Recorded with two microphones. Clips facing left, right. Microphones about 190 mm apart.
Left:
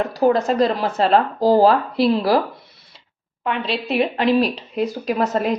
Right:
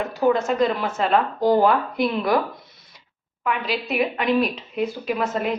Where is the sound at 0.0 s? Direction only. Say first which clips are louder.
Left 3 dB; 35° left (ahead or behind).